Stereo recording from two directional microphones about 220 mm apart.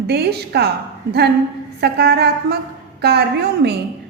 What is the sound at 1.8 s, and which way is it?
A woman's voice, 45° right (ahead or behind).